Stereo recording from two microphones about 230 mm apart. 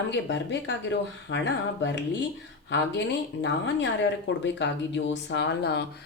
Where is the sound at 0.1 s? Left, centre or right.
Left.